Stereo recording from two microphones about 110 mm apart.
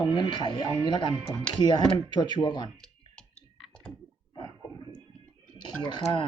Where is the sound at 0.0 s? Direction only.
45° left (ahead or behind).